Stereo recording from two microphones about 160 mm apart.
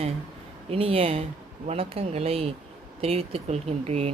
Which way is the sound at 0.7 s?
35° right (ahead or behind).